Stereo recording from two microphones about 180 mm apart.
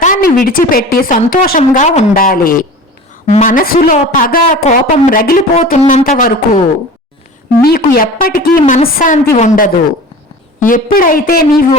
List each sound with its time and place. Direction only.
0.0 s a woman's voice: 50° left (ahead or behind)
5.6 s a woman's voice: 40° left (ahead or behind)